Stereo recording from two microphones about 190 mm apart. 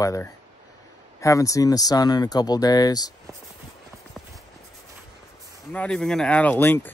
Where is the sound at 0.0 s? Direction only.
15° left (ahead or behind).